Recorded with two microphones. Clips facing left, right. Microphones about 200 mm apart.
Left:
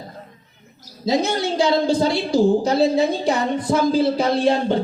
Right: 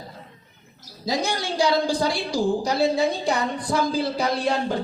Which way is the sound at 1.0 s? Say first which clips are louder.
Left 6 dB; 25° left (ahead or behind).